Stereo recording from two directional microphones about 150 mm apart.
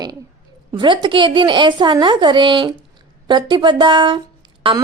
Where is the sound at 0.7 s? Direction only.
30° right (ahead or behind).